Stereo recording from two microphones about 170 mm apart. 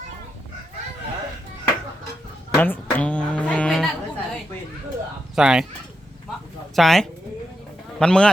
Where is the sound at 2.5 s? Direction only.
10° left (ahead or behind).